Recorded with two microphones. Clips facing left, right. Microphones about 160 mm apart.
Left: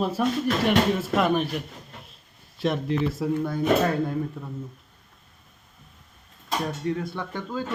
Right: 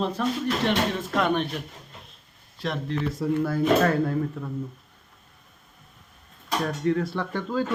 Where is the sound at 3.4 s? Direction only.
20° left (ahead or behind).